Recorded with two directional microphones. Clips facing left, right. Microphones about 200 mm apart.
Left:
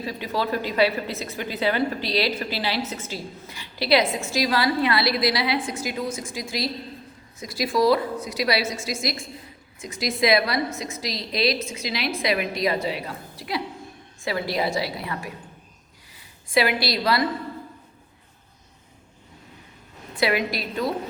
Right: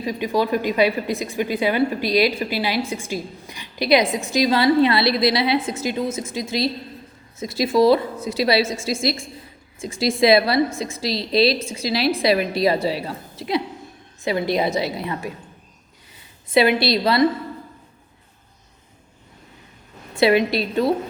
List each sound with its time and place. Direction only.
0.0 s a woman's voice: 15° right (ahead or behind)
16.5 s a woman's voice: 25° right (ahead or behind)
20.1 s a woman's voice: 25° right (ahead or behind)